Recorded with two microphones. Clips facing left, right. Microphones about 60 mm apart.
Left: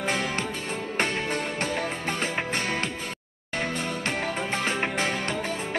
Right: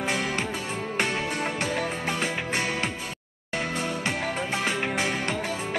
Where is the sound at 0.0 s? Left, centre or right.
Left.